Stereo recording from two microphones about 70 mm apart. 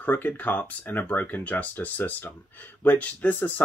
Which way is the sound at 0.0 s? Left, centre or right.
Left.